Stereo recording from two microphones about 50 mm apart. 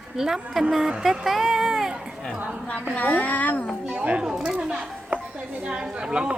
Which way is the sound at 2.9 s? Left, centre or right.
Left.